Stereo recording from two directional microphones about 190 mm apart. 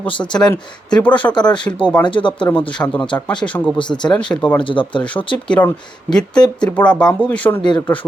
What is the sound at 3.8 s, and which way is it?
Speech, 25° left (ahead or behind).